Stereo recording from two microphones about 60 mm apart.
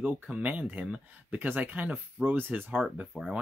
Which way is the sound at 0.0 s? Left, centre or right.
Right.